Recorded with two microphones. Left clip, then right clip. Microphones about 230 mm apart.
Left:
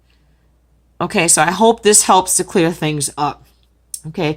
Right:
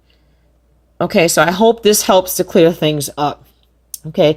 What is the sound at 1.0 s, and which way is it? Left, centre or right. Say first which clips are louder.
Speech: right 3 dB; centre.